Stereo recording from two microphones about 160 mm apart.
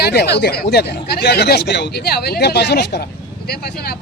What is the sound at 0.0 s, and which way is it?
A man's voice, 90° left.